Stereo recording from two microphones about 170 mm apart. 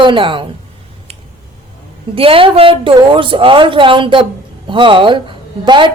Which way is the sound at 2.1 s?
30° right (ahead or behind).